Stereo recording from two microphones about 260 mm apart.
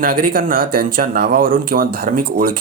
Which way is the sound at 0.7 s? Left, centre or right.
Right.